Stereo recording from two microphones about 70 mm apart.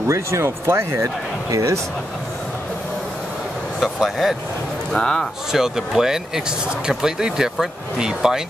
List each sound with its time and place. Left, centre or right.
0.1 s speech: right
0.9 s speech: right
3.8 s speech: centre
4.9 s a man's voice: centre
5.5 s speech: centre